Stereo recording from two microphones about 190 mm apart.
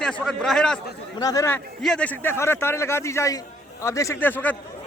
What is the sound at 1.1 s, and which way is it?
Speech, 20° left (ahead or behind).